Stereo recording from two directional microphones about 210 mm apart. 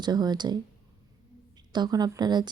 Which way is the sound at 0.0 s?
20° right (ahead or behind).